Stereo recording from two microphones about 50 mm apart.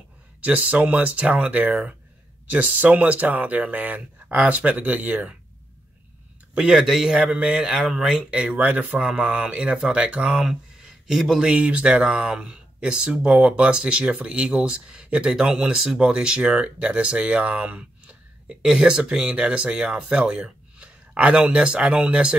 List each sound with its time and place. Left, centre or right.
0.4 s speech: right
6.5 s speech: right
6.8 s a man's voice: centre
7.1 s speech: right
7.6 s speech: centre
8.3 s speech: centre
11.1 s a man's voice: centre
11.4 s speech: right